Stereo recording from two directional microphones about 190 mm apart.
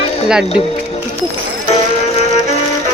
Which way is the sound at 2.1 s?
35° left (ahead or behind).